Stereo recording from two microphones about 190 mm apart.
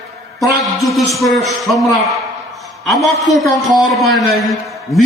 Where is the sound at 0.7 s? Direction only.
Centre (ahead or behind).